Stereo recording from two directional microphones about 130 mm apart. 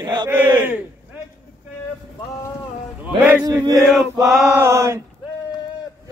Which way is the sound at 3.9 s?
Centre (ahead or behind).